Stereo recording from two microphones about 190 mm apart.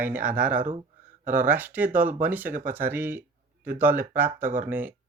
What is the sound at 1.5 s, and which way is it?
Speech, 10° right (ahead or behind).